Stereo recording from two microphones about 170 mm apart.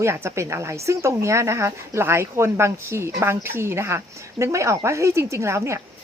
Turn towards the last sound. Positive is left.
turn(degrees=-15)  # may be behind; listen again after turning